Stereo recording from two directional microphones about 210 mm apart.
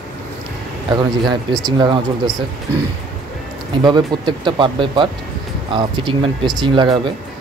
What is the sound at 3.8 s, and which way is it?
Speech, 20° right (ahead or behind).